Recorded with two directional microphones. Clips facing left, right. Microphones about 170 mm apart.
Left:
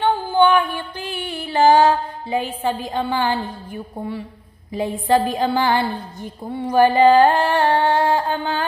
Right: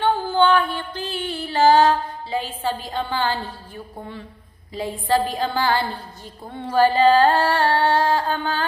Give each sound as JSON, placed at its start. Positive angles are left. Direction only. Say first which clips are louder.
{"t": 0.0, "sound": "music", "louder": "left 2 dB", "side_deg": 15}
{"t": 4.7, "sound": "a sound", "louder": "left 3 dB", "side_deg": 20}
{"t": 6.6, "sound": "music", "louder": "left 3 dB", "side_deg": 15}